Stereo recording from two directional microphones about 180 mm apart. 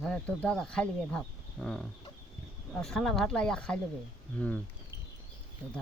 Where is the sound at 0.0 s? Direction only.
5° left (ahead or behind).